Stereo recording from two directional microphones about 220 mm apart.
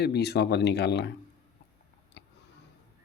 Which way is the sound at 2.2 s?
50° left (ahead or behind).